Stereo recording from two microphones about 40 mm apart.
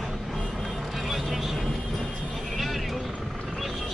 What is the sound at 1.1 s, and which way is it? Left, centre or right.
Vehicle, centre.